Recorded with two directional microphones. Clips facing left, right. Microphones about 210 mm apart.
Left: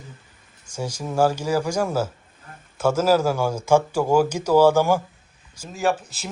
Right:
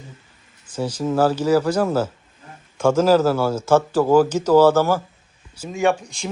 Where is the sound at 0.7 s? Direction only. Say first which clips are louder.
Right 6 dB; 10° left (ahead or behind).